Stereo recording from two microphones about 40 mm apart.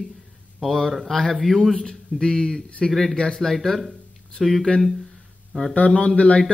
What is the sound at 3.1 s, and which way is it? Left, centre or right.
Speech, left.